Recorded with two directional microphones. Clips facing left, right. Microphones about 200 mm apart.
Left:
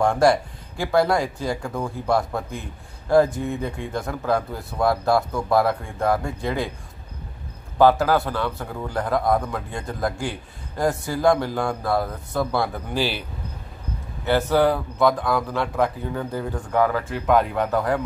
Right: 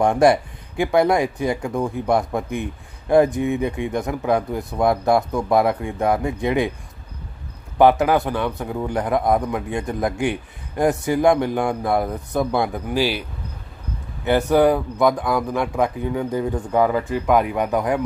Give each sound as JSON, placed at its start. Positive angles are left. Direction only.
{"t": 0.0, "sound": "a man's voice", "side_deg": -20}
{"t": 7.7, "sound": "a man's voice", "side_deg": -20}
{"t": 14.2, "sound": "speech", "side_deg": -15}